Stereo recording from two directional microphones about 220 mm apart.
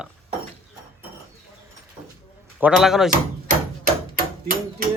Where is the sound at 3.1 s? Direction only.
40° right (ahead or behind).